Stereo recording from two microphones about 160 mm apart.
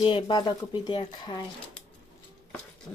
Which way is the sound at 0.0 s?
30° left (ahead or behind).